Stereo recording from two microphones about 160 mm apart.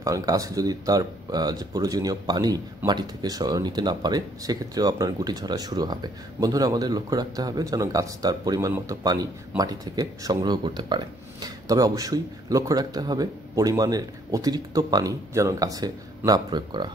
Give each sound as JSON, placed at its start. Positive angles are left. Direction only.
{"t": 0.0, "sound": "speech", "side_deg": -20}